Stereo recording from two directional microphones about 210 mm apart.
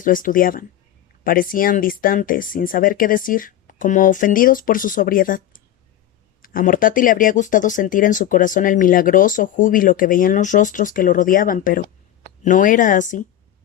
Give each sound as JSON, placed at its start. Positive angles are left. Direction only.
{"t": 0.0, "sound": "speech", "side_deg": 40}